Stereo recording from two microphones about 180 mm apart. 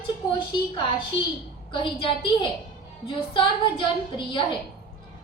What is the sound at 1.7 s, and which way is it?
A woman's voice, 30° left (ahead or behind).